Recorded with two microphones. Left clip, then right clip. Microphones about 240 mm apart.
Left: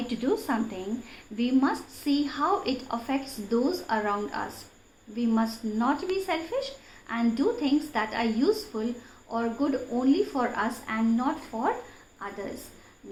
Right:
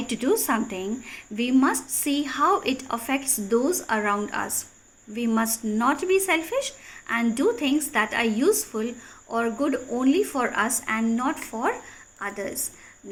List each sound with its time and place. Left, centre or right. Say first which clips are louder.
0.1 s a woman's voice: right 5 dB; right